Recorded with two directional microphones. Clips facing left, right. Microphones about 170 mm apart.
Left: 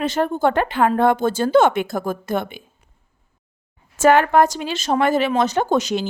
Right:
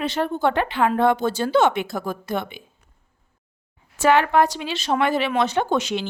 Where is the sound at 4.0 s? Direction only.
45° left (ahead or behind).